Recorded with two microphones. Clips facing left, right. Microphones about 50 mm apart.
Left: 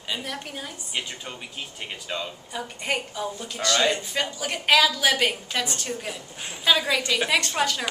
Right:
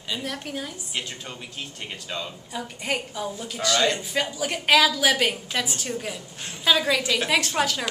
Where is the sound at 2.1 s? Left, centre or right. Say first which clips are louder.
Left 1 dB; centre.